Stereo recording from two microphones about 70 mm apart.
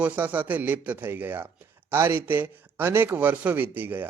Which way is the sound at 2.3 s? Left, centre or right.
Right.